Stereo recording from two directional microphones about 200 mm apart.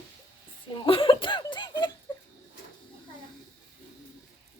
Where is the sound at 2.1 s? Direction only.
20° left (ahead or behind).